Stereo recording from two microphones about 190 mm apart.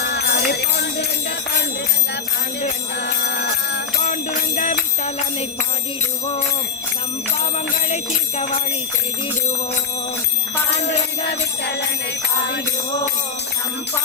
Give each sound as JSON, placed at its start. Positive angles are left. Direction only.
{"t": 0.0, "sound": "jingle bell", "side_deg": 60}
{"t": 3.0, "sound": "a sound", "side_deg": 55}
{"t": 4.0, "sound": "jingle bell", "side_deg": 45}
{"t": 7.9, "sound": "bell", "side_deg": 35}